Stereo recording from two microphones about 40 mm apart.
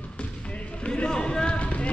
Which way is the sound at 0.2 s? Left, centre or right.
Left.